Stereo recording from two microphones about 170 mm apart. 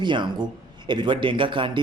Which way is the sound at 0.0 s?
25° right (ahead or behind).